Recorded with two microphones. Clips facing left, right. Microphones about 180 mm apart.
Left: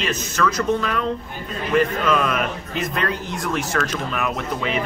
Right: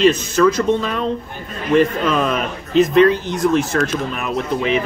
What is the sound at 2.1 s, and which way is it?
Speech, 30° right (ahead or behind).